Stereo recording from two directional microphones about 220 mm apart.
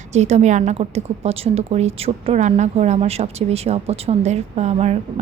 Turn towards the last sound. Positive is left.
turn(degrees=-30)  # may be behind; listen again after turning